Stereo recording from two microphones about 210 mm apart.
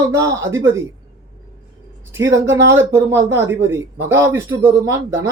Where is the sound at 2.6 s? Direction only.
60° right (ahead or behind).